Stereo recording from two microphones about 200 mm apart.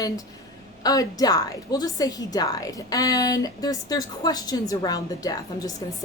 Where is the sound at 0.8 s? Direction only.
20° left (ahead or behind).